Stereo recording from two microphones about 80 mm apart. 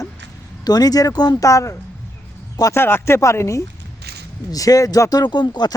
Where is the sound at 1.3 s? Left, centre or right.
Left.